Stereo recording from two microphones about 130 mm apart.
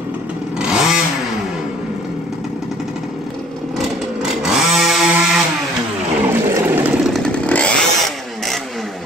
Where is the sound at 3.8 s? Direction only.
Centre (ahead or behind).